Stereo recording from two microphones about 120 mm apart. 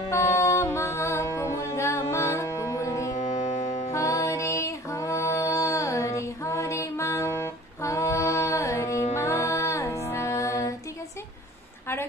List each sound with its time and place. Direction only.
0.1 s music: 25° left (ahead or behind)
3.2 s music: 90° left
3.9 s music: 25° left (ahead or behind)